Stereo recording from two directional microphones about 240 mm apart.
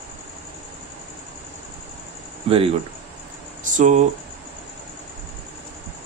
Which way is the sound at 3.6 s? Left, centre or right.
Right.